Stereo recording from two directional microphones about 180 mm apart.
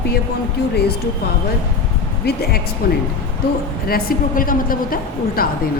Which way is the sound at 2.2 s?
60° left (ahead or behind).